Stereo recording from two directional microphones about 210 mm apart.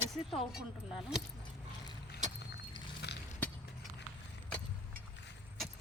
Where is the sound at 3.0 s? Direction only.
50° left (ahead or behind).